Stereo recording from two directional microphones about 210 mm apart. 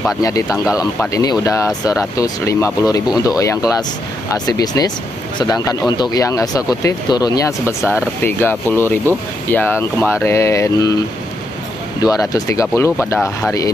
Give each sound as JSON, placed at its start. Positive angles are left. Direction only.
{"t": 0.2, "sound": "speech", "side_deg": 15}
{"t": 12.0, "sound": "speech", "side_deg": 15}